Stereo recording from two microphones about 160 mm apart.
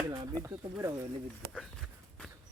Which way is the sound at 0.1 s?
25° right (ahead or behind).